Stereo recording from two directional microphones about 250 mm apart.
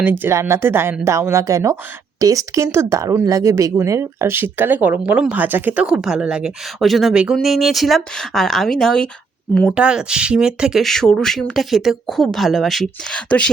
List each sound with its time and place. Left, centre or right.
0.0 s speech: centre